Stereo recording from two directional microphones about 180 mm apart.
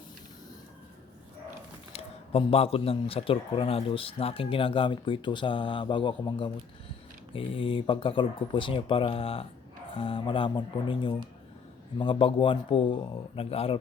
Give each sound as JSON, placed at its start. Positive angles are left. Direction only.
{"t": 1.9, "sound": "speech", "side_deg": 35}